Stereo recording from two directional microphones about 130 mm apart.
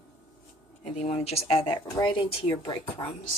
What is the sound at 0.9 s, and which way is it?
Speech, 50° left (ahead or behind).